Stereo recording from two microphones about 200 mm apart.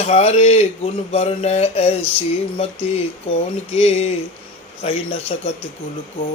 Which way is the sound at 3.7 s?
30° left (ahead or behind).